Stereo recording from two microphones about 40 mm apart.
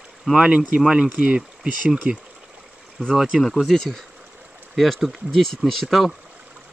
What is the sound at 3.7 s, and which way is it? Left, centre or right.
Speech, centre.